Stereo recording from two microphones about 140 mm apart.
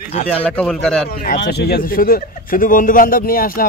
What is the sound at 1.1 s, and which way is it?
Speech, 90° left.